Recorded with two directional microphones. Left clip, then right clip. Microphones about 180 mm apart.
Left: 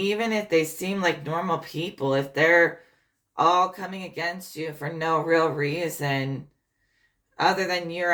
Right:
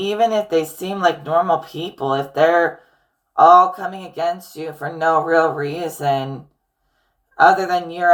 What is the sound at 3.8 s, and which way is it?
Speech, 20° left (ahead or behind).